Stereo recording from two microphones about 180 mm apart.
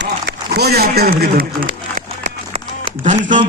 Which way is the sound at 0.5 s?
60° right (ahead or behind).